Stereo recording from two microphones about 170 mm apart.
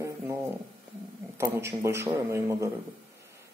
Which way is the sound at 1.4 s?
15° right (ahead or behind).